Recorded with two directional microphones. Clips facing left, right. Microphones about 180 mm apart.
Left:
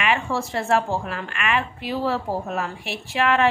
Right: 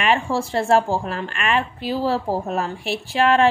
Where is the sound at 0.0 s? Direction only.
35° right (ahead or behind).